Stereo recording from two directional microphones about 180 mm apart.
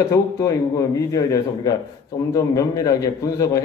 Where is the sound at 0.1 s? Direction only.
15° left (ahead or behind).